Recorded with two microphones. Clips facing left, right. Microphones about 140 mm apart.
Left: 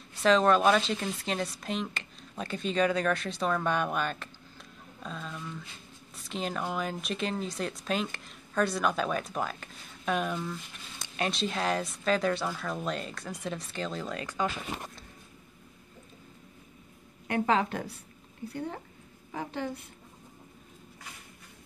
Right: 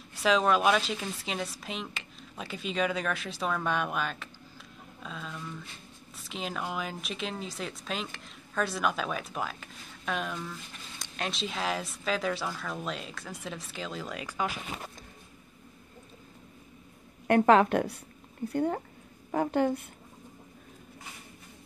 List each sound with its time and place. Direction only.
0.2 s speech: 5° right (ahead or behind)
17.3 s a woman's voice: 60° right (ahead or behind)